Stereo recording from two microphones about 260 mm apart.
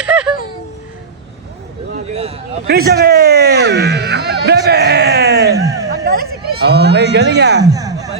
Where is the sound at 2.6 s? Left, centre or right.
Right.